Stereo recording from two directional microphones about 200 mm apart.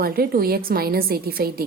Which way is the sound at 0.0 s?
50° right (ahead or behind).